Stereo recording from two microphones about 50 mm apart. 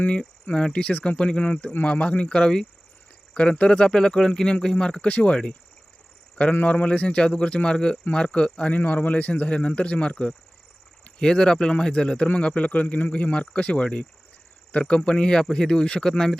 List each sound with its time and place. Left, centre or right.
0.1 s a man's voice: left
6.7 s a man's voice: left
8.8 s a man's voice: left; by 16.4 s centre